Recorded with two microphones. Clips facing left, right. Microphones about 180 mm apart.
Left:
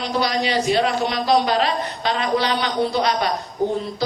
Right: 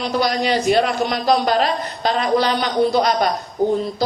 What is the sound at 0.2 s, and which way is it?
A man's voice, 50° right (ahead or behind).